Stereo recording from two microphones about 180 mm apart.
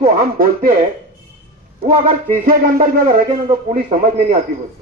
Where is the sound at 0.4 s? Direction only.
50° right (ahead or behind).